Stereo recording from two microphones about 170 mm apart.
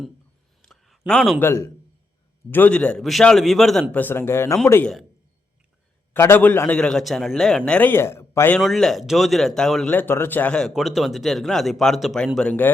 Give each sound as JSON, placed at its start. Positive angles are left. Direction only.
{"t": 0.6, "sound": "a sound", "side_deg": 0}
{"t": 1.5, "sound": "a man's voice", "side_deg": 20}
{"t": 3.9, "sound": "a man's voice", "side_deg": 10}
{"t": 6.1, "sound": "a man's voice", "side_deg": 15}
{"t": 8.6, "sound": "speech", "side_deg": 0}